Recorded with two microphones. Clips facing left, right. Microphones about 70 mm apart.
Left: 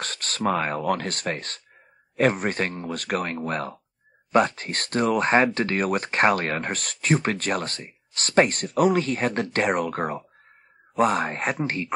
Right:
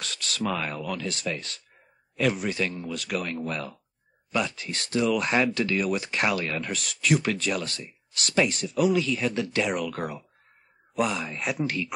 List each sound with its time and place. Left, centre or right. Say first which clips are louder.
0.0 s speech: left 4 dB; left
11.5 s speech: left 1 dB; left